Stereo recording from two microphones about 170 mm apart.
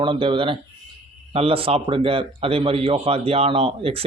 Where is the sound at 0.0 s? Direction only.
30° right (ahead or behind).